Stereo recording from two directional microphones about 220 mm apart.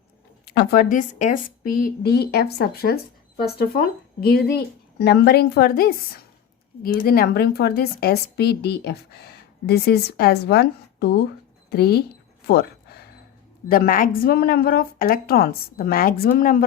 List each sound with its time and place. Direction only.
0.4 s speech: 45° left (ahead or behind)
12.5 s a sound: 50° left (ahead or behind)
13.7 s a woman's voice: 40° left (ahead or behind)